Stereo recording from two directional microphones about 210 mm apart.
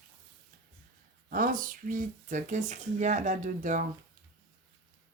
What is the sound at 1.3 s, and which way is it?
Speech, 40° right (ahead or behind).